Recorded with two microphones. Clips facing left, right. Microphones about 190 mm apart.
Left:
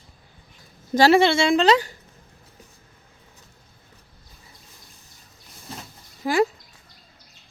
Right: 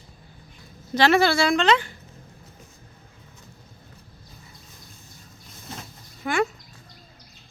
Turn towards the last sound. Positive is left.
turn(degrees=25)  # may be behind; listen again after turning